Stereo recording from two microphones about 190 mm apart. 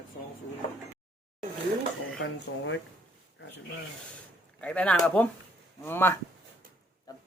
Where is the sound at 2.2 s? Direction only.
70° left (ahead or behind).